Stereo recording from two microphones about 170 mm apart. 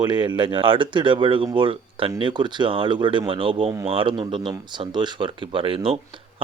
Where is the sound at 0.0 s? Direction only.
25° right (ahead or behind).